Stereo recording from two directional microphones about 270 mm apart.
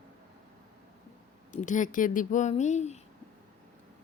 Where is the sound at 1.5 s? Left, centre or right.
Left.